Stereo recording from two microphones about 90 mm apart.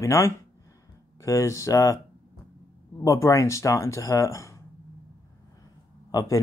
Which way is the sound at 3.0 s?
35° left (ahead or behind).